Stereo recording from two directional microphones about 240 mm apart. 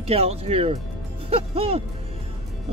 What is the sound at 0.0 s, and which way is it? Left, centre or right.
Speech, right.